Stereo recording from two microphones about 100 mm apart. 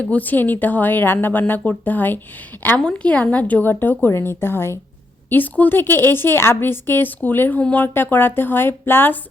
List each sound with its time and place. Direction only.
0.0 s a woman's voice: 15° left (ahead or behind)